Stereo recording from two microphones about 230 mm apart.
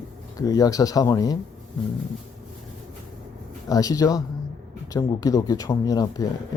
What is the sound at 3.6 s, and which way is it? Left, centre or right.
Speech, centre.